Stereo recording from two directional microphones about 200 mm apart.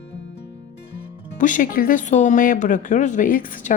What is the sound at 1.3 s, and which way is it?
Speech, 40° left (ahead or behind).